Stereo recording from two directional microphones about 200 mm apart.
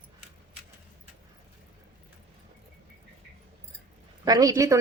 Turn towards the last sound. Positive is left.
turn(degrees=-15)  # may be behind; listen again after turning